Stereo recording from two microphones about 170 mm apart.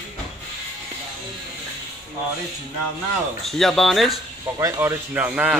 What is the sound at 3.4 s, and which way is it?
Speech, centre (ahead or behind).